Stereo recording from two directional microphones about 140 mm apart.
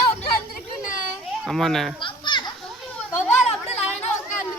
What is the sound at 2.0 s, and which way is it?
Children playing, 35° left (ahead or behind).